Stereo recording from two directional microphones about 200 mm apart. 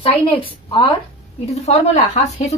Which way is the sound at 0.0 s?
25° left (ahead or behind).